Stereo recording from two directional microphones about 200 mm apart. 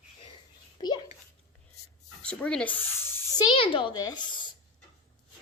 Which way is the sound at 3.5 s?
25° left (ahead or behind).